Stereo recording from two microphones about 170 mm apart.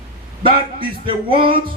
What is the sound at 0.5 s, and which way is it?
Speech, 65° right (ahead or behind).